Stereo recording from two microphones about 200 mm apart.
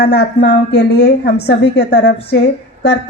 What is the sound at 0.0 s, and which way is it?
A woman's voice, 55° left (ahead or behind).